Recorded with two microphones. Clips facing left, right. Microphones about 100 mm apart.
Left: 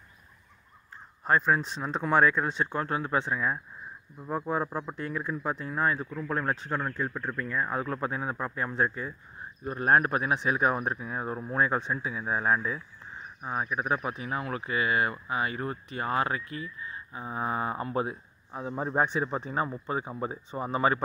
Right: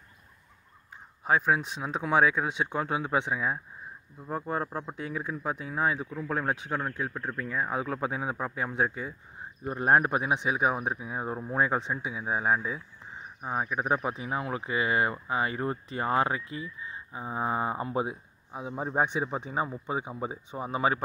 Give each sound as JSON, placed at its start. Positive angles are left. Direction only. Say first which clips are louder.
{"t": 1.2, "sound": "speech", "louder": "even", "side_deg": -5}
{"t": 4.3, "sound": "speech", "louder": "left 2 dB", "side_deg": 0}
{"t": 9.4, "sound": "speech", "louder": "right 1 dB", "side_deg": -25}